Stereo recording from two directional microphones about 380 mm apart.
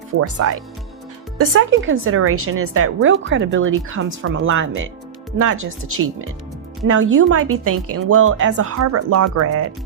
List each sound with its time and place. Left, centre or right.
0.2 s a woman's voice: right